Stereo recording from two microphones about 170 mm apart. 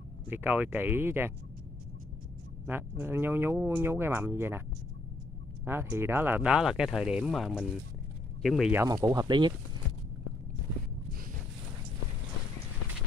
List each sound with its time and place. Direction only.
0.3 s speech: 10° right (ahead or behind)
2.6 s speech: 15° right (ahead or behind)
5.7 s speech: 15° right (ahead or behind)
8.7 s speech: 20° right (ahead or behind)